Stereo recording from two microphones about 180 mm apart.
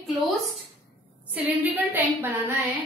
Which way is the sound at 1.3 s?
10° right (ahead or behind).